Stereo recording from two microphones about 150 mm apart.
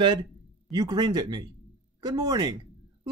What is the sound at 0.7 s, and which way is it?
Speech, 25° right (ahead or behind).